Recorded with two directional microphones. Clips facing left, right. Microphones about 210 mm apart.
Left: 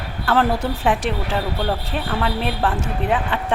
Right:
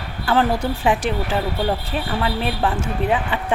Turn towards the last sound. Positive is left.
turn(degrees=0)  # may be behind; listen again after turning